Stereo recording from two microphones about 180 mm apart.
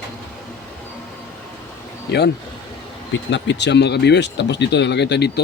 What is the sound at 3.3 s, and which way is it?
Speech, 75° left (ahead or behind).